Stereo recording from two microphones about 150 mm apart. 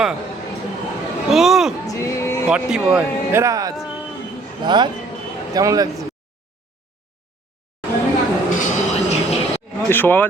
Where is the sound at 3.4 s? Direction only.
25° right (ahead or behind).